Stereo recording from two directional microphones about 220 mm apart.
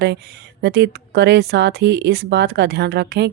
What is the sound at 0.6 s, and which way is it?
Speech, 45° right (ahead or behind).